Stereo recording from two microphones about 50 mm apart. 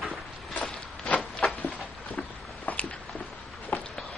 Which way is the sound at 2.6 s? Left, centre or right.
Left.